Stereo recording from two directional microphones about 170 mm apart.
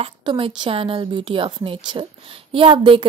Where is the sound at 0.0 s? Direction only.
30° right (ahead or behind).